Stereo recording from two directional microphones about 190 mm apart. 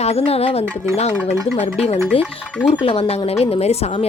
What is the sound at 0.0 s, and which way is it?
A woman's voice, 35° left (ahead or behind).